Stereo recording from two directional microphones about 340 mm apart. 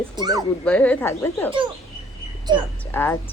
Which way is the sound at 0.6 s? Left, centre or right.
Centre.